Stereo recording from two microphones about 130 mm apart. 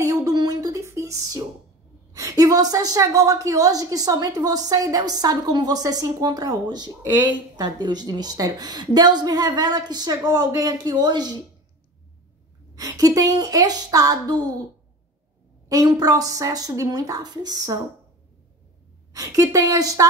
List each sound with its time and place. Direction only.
0.0 s a sound: 25° right (ahead or behind)
2.1 s a woman's voice: 25° right (ahead or behind)
12.7 s a woman's voice: 25° right (ahead or behind)
15.7 s a woman's voice: 30° right (ahead or behind)
19.1 s a woman's voice: 25° right (ahead or behind)